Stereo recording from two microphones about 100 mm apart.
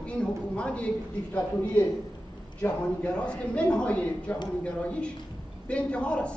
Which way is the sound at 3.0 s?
10° left (ahead or behind).